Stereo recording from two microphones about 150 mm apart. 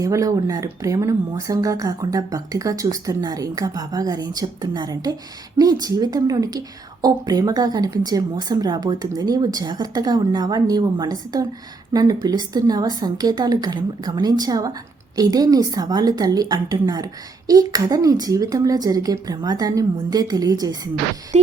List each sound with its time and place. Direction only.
0.0 s a woman's voice: 25° right (ahead or behind)
21.3 s music: 50° right (ahead or behind)